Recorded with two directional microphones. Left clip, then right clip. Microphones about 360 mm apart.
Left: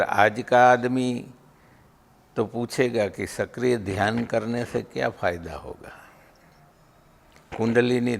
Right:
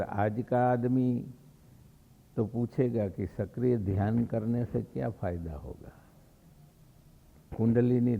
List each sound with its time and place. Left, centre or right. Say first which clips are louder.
0.0 s speech: left 11 dB; centre
2.3 s speech: left 7 dB; centre
7.5 s speech: left 7 dB; centre